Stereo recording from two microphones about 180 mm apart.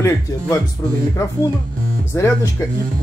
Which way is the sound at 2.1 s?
15° left (ahead or behind).